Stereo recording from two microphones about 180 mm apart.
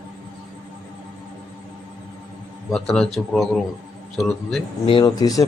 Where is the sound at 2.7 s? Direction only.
5° left (ahead or behind).